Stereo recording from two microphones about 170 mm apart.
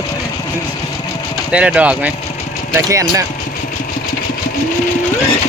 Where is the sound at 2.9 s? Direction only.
20° right (ahead or behind).